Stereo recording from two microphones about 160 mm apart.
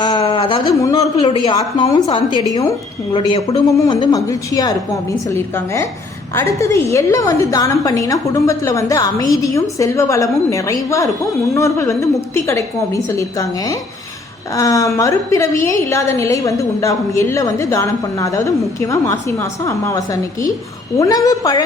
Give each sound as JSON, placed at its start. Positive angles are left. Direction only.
{"t": 0.0, "sound": "a sound", "side_deg": 30}
{"t": 0.7, "sound": "a woman's voice", "side_deg": 20}
{"t": 21.0, "sound": "a woman's voice", "side_deg": 20}